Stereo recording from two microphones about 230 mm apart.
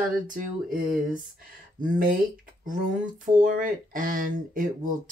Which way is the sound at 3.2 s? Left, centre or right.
Right.